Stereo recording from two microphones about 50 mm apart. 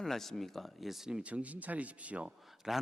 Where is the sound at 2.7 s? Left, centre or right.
Centre.